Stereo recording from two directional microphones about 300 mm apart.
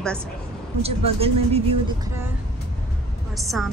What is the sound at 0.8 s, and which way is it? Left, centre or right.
Speech, centre.